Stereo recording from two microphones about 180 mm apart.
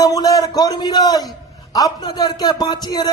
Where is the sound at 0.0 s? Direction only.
20° left (ahead or behind).